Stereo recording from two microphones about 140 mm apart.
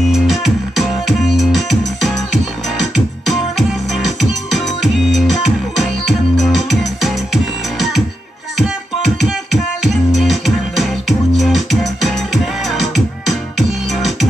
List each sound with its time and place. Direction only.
0.1 s music: centre (ahead or behind)
3.3 s music: centre (ahead or behind)
6.4 s music: centre (ahead or behind)
8.5 s music: centre (ahead or behind)